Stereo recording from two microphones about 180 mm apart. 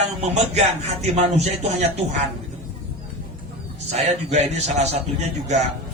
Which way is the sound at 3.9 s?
35° right (ahead or behind).